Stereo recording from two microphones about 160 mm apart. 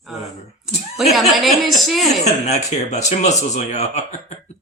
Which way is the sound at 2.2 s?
45° left (ahead or behind).